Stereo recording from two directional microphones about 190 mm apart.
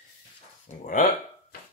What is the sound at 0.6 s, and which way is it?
Speech, 45° left (ahead or behind).